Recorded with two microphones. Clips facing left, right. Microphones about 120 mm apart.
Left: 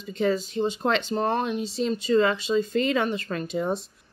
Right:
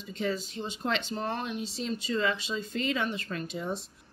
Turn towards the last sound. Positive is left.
turn(degrees=60)  # may be behind; listen again after turning